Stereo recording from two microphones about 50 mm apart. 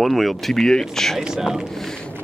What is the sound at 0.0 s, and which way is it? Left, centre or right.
Speech, centre.